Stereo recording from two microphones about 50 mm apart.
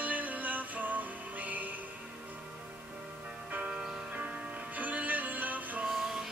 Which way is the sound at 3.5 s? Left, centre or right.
Right.